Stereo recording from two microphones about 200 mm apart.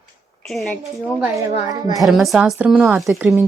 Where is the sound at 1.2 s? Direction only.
15° right (ahead or behind).